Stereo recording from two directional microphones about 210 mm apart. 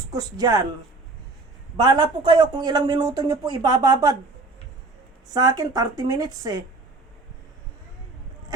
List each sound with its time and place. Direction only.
0.1 s speech: 15° right (ahead or behind)
1.7 s speech: 20° right (ahead or behind)
5.3 s speech: 15° right (ahead or behind)